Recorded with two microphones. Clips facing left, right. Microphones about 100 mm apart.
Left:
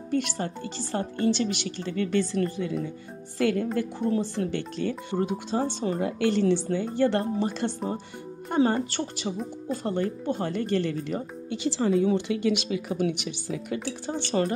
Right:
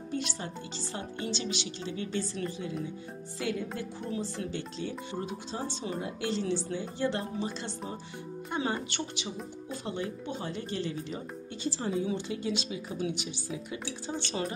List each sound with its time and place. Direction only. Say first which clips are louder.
0.1 s speech: left 8 dB; 55° left (ahead or behind); by 11.9 s 85° left
12.0 s speech: left 8 dB; 65° left (ahead or behind)